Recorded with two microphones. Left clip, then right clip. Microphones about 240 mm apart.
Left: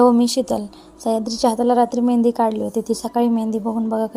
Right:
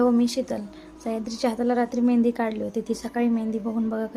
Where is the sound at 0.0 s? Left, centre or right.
Centre.